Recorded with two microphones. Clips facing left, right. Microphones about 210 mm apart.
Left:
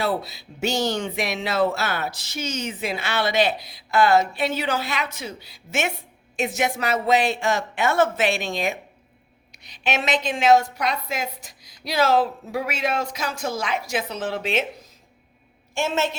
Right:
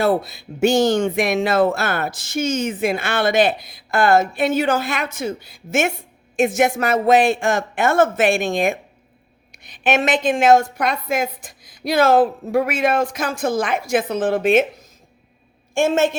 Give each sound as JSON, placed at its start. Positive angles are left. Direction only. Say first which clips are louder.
{"t": 0.0, "sound": "speech", "louder": "right 7 dB", "side_deg": -50}
{"t": 15.7, "sound": "a woman's voice", "louder": "right 7 dB", "side_deg": -50}